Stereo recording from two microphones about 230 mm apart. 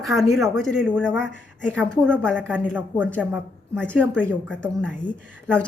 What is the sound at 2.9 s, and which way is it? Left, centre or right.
Speech, centre.